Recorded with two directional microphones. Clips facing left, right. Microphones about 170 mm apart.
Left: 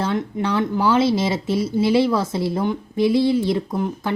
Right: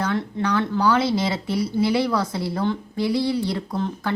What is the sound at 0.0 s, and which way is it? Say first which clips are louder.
A woman's voice: left 2 dB; 20° left (ahead or behind).